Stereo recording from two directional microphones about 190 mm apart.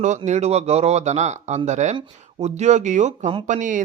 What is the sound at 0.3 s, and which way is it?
Speech, 35° right (ahead or behind).